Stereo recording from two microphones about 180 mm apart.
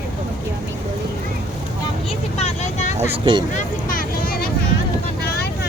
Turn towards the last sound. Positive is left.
turn(degrees=55)  # may be behind; listen again after turning